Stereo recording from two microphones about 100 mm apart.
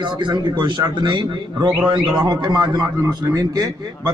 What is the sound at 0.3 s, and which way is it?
A man's voice, 50° right (ahead or behind).